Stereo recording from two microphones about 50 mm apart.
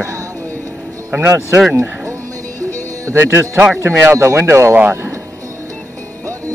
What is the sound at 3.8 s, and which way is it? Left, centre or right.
Speech, right.